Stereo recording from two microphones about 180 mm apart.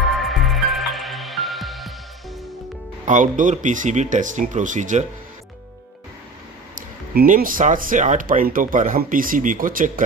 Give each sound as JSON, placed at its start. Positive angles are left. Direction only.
{"t": 0.2, "sound": "music", "side_deg": 0}
{"t": 3.1, "sound": "speech", "side_deg": -45}
{"t": 6.7, "sound": "speech", "side_deg": -50}